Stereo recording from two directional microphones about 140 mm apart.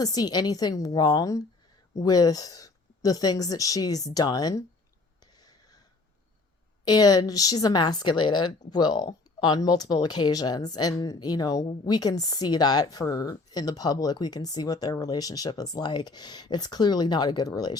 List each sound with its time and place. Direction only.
0.0 s a woman's voice: 30° left (ahead or behind)
6.8 s a woman's voice: 30° left (ahead or behind)